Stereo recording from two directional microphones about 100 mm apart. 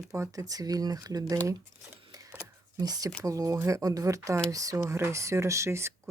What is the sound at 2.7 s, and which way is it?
Speech, 40° right (ahead or behind).